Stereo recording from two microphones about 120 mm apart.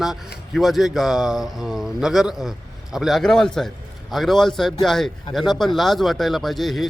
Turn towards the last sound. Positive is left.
turn(degrees=0)  # may be behind; listen again after turning